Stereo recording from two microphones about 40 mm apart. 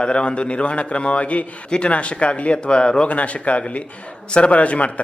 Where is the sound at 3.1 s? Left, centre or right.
Left.